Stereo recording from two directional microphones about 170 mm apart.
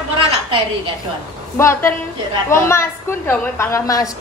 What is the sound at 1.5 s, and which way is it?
A woman's voice, 15° left (ahead or behind).